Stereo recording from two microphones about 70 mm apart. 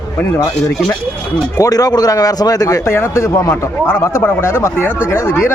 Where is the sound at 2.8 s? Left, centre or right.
Left.